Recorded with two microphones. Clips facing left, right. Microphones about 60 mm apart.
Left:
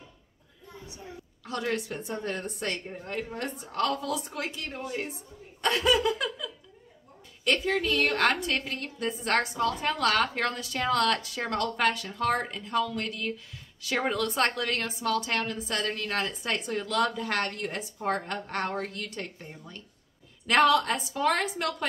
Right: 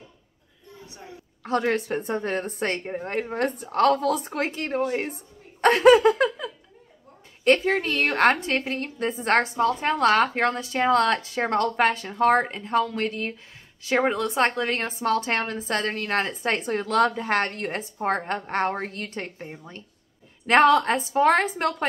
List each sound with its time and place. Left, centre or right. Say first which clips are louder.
1.4 s a woman's voice: right 7 dB; right
5.6 s laughter: right 10 dB; right
7.4 s a woman's voice: right 6 dB; right